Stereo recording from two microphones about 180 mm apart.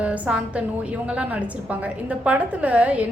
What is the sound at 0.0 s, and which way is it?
A woman's voice, 5° right (ahead or behind).